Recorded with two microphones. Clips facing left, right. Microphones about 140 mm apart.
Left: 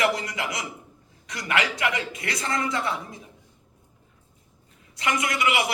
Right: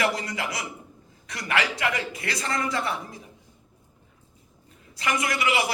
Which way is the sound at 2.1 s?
30° right (ahead or behind).